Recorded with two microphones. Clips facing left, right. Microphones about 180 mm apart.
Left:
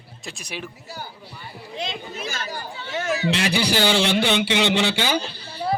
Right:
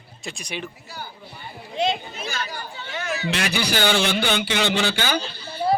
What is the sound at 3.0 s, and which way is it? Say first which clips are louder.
A man's voice: left 3 dB; 30° left (ahead or behind).